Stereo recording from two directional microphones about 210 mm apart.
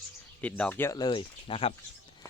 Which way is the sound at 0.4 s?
5° left (ahead or behind).